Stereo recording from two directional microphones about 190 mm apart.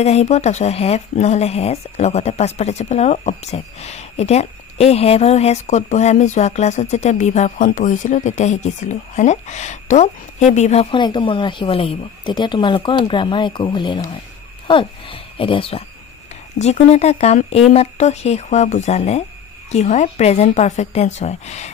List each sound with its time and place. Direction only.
0.0 s speech: 35° left (ahead or behind)